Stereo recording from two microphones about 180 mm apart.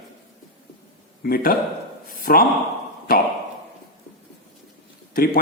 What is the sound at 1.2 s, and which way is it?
A man's voice, 55° left (ahead or behind).